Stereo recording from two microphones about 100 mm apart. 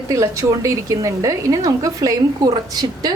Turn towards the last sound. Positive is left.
turn(degrees=-40)  # may be behind; listen again after turning